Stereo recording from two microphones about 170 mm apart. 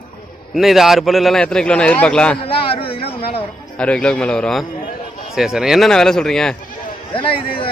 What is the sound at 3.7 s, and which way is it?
A man's voice, 5° left (ahead or behind).